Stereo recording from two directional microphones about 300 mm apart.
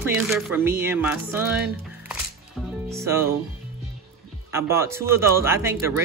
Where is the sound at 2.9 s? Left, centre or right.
Centre.